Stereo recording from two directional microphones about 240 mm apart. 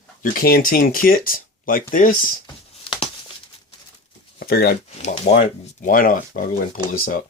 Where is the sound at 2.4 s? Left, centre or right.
Left.